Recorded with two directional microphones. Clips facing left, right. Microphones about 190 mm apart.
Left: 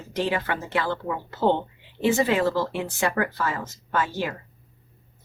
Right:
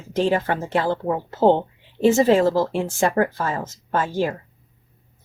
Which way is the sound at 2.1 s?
30° right (ahead or behind).